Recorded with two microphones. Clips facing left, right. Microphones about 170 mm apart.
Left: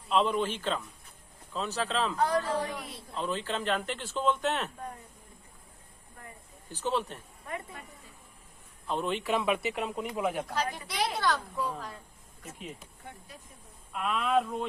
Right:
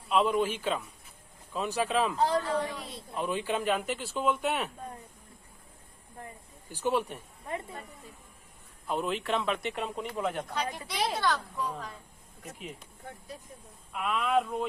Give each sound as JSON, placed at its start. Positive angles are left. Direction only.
{"t": 0.1, "sound": "speech", "side_deg": -5}
{"t": 2.1, "sound": "speech", "side_deg": -25}
{"t": 2.4, "sound": "speech", "side_deg": 0}
{"t": 3.2, "sound": "speech", "side_deg": -15}
{"t": 6.7, "sound": "speech", "side_deg": -10}
{"t": 7.4, "sound": "speech", "side_deg": -25}
{"t": 8.9, "sound": "speech", "side_deg": -5}
{"t": 13.9, "sound": "speech", "side_deg": 0}